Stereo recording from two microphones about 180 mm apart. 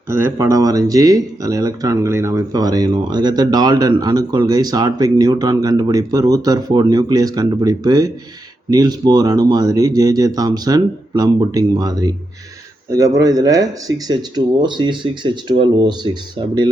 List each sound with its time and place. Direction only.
0.1 s speech: 15° right (ahead or behind)